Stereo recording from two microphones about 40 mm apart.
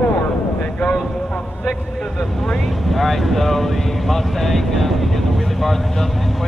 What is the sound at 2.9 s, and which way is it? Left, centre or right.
Vehicle, centre.